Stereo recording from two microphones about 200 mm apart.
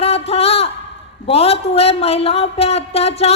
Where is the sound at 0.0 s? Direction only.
30° left (ahead or behind).